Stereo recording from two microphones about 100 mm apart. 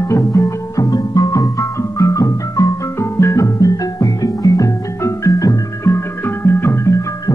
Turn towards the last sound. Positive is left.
turn(degrees=30)  # may be behind; listen again after turning